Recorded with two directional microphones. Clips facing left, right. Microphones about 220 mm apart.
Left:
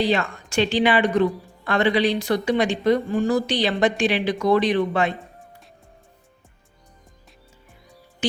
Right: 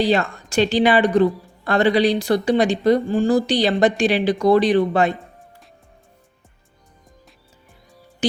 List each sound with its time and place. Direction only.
0.0 s speech: 35° right (ahead or behind)